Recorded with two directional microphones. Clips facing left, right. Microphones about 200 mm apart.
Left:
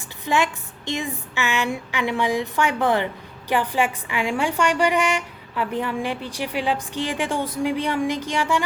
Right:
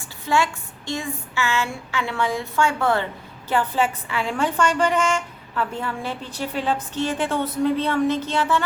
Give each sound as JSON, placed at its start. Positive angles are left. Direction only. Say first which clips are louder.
{"t": 0.3, "sound": "a woman's voice", "louder": "even", "side_deg": 20}